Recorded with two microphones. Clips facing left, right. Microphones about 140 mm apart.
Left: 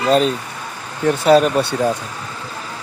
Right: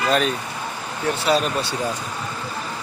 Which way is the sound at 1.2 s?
45° left (ahead or behind).